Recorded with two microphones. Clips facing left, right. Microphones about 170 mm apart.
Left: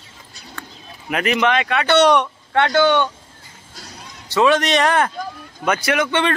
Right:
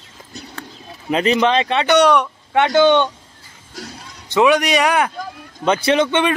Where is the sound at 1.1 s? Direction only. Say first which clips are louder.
Right 3 dB; 30° right (ahead or behind).